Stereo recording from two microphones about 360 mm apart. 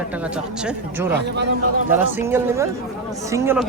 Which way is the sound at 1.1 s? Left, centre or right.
Right.